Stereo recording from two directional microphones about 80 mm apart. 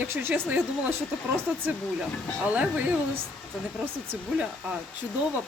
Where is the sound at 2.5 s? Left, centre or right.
Centre.